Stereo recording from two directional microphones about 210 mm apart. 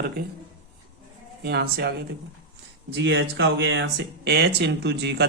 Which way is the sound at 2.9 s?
55° right (ahead or behind).